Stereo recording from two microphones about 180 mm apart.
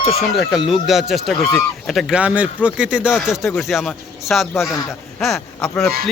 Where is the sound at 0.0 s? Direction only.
35° left (ahead or behind).